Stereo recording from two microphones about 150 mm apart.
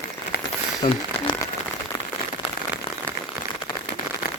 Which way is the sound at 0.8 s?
55° left (ahead or behind).